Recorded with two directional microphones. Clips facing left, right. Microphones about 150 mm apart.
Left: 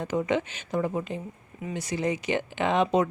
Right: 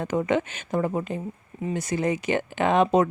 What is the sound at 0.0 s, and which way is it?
Speech, 55° right (ahead or behind).